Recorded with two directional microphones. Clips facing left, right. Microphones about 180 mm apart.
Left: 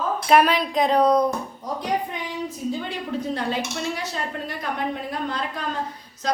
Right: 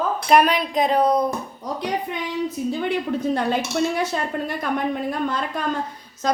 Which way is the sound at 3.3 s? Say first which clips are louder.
Right 5 dB; 55° right (ahead or behind).